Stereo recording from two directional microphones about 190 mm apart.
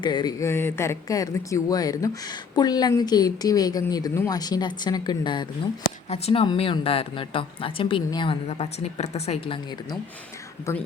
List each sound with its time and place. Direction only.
0.0 s speech: 25° left (ahead or behind)
10.7 s speech: 15° left (ahead or behind)